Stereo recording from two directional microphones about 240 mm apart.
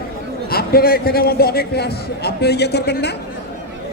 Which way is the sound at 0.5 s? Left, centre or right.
Left.